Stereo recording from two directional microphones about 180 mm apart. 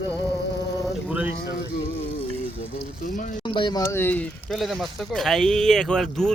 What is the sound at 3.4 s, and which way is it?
Speech, 25° left (ahead or behind).